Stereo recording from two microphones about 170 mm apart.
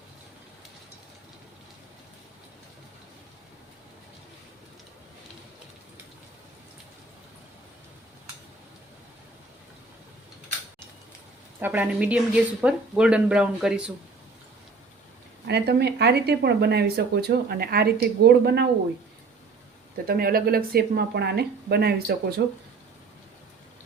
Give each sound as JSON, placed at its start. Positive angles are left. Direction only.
{"t": 11.6, "sound": "speech", "side_deg": -10}
{"t": 15.4, "sound": "speech", "side_deg": -80}
{"t": 20.1, "sound": "speech", "side_deg": -60}